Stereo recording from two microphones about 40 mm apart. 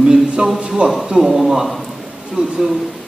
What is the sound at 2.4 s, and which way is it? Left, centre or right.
Speech, right.